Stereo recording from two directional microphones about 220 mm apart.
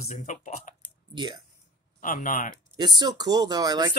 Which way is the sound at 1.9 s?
35° left (ahead or behind).